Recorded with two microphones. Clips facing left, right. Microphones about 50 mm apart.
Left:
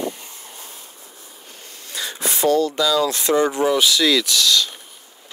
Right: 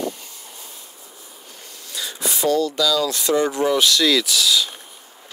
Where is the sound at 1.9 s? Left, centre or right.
Left.